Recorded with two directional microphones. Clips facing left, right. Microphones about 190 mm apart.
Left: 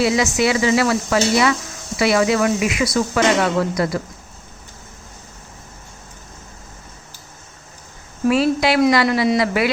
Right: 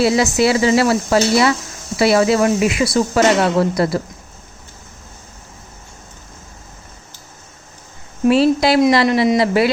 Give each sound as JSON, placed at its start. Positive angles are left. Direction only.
{"t": 0.0, "sound": "speech", "side_deg": -35}
{"t": 8.3, "sound": "speech", "side_deg": -30}
{"t": 9.0, "sound": "a man's voice", "side_deg": -20}